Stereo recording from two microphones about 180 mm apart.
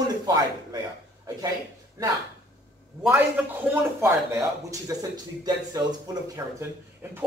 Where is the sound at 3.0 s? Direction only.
10° right (ahead or behind).